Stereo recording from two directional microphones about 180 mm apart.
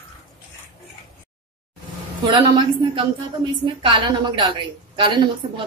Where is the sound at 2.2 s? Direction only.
25° right (ahead or behind).